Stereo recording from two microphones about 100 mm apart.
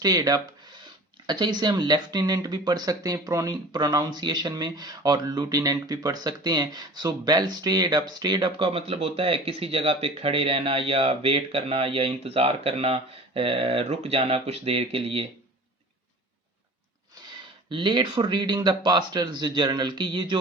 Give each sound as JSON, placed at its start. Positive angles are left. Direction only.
{"t": 0.0, "sound": "speech", "side_deg": -40}
{"t": 17.7, "sound": "speech", "side_deg": -55}